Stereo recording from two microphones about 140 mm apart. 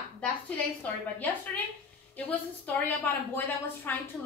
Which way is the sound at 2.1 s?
10° left (ahead or behind).